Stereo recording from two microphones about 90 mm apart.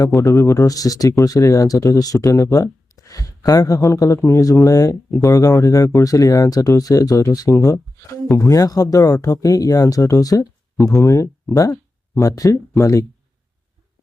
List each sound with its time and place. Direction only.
0.2 s speech: 40° left (ahead or behind)